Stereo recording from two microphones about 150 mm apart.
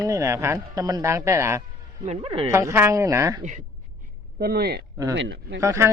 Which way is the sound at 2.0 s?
40° right (ahead or behind).